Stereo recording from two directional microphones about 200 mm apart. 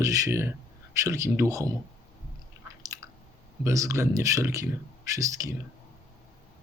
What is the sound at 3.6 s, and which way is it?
Speech, 15° right (ahead or behind).